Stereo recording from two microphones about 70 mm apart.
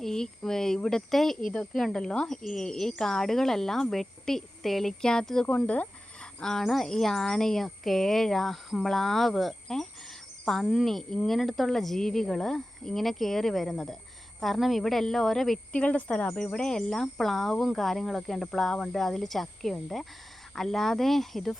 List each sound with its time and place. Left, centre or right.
0.0 s speech: centre
5.5 s speech: centre
6.4 s speech: centre
15.7 s speech: centre